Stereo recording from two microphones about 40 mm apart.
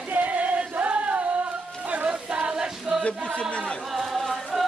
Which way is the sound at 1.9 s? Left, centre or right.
Right.